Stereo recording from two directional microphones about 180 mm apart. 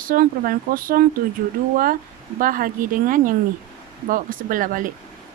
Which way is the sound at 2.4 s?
50° right (ahead or behind).